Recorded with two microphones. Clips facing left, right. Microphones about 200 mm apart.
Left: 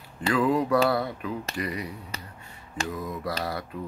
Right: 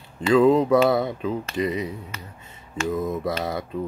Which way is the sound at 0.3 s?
25° right (ahead or behind).